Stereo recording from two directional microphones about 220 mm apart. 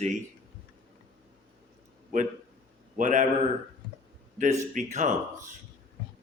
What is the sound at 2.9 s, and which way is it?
Speech, 35° right (ahead or behind).